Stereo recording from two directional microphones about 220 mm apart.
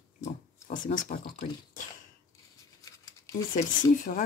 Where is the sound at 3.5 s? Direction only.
35° left (ahead or behind).